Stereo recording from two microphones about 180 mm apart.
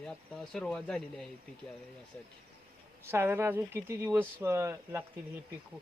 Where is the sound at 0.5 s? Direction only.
5° left (ahead or behind).